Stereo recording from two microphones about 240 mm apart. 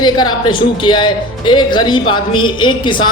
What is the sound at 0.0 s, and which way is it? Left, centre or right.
Speech, centre.